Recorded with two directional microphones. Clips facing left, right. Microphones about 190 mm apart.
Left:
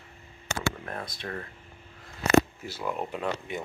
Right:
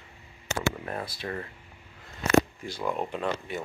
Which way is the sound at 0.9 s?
5° right (ahead or behind).